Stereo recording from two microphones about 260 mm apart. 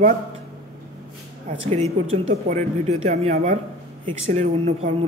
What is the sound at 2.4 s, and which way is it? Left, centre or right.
Speech, right.